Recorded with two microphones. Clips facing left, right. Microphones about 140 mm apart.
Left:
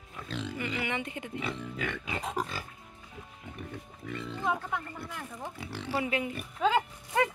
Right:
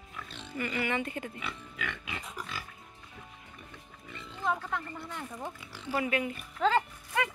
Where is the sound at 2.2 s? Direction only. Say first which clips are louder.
Left 10 dB; 90° left.